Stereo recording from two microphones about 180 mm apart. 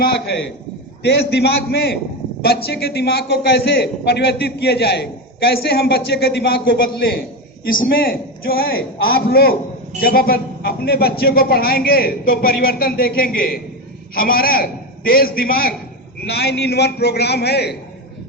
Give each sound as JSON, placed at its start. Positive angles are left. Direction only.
{"t": 1.0, "sound": "a man's voice", "side_deg": 65}